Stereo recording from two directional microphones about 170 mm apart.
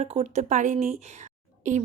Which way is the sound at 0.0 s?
40° right (ahead or behind).